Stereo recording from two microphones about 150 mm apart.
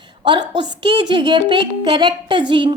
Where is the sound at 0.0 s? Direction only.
30° right (ahead or behind).